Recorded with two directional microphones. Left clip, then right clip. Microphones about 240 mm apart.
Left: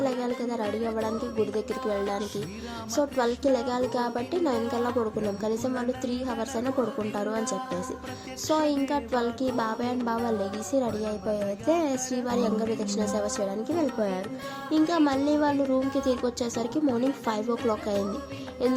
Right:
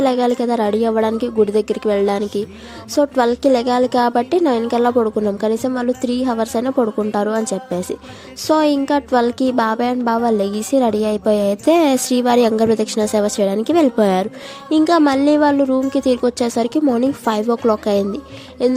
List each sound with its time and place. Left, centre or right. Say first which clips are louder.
0.0 s a woman's voice: right 13 dB; right